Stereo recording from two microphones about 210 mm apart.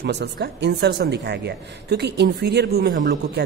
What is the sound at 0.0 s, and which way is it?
Speech, 55° right (ahead or behind).